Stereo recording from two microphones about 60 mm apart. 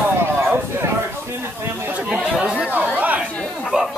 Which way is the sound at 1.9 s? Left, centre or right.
Right.